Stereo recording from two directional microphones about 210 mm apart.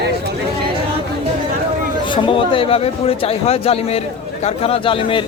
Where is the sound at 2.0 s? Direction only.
25° left (ahead or behind).